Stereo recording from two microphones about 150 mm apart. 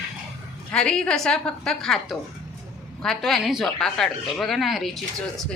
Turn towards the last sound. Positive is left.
turn(degrees=0)  # may be behind; listen again after turning